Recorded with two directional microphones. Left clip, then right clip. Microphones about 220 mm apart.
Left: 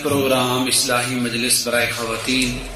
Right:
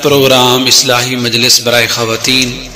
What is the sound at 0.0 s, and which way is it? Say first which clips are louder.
Speech: right 11 dB; 45° right (ahead or behind).